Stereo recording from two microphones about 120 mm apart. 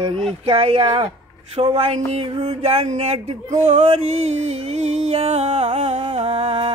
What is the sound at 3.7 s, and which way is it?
Music, 65° right (ahead or behind).